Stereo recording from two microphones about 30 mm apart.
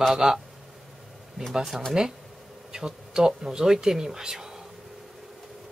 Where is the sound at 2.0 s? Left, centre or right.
Right.